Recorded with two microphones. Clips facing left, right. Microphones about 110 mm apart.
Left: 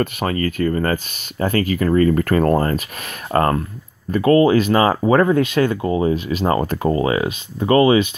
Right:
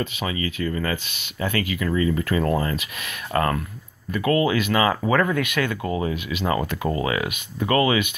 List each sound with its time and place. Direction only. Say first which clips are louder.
0.0 s speech: left 7 dB; 50° left (ahead or behind); by 8.1 s 30° left (ahead or behind)